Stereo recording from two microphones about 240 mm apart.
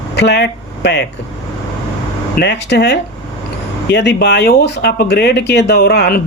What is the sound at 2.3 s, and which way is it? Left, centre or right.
Speech, left.